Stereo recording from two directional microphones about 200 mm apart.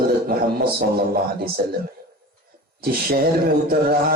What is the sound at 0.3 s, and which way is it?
Music, 50° right (ahead or behind).